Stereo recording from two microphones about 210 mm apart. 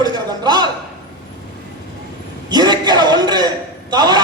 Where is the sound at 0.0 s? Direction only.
20° right (ahead or behind).